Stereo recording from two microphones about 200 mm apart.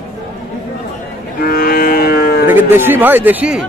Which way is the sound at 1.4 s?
45° left (ahead or behind).